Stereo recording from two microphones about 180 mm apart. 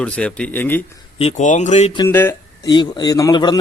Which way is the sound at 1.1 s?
40° left (ahead or behind).